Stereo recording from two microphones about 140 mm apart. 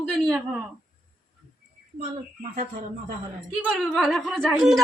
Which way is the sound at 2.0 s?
50° right (ahead or behind).